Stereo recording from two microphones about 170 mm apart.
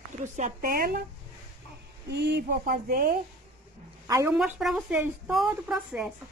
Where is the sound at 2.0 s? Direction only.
75° right (ahead or behind); by 3.2 s 60° right (ahead or behind).